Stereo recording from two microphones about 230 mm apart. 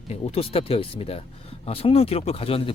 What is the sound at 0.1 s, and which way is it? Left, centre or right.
Speech, left.